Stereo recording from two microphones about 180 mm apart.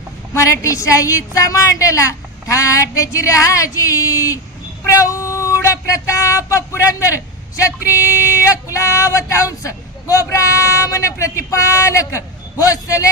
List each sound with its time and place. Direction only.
0.3 s speech: 15° left (ahead or behind)